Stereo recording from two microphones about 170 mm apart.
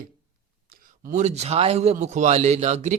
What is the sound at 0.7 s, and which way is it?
A man's voice, 50° right (ahead or behind).